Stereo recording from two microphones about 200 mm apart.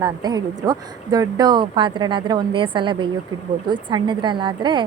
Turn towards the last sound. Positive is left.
turn(degrees=-25)  # may be behind; listen again after turning